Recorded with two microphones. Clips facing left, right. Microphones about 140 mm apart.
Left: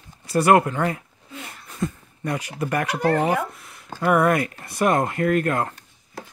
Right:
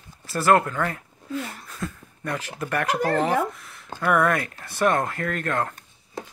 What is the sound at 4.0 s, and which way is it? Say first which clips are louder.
Speech: left 3 dB; 10° left (ahead or behind).